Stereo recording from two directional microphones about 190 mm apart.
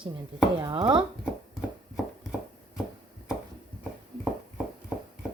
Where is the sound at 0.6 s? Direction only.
25° right (ahead or behind).